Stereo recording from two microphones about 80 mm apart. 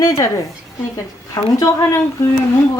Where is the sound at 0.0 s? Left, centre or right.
Left.